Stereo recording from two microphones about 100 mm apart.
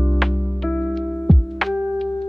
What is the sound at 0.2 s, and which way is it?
Music, 5° left (ahead or behind).